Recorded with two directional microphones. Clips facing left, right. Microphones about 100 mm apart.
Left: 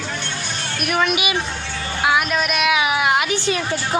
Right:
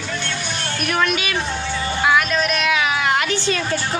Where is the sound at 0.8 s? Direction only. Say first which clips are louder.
Left 1 dB; 5° left (ahead or behind).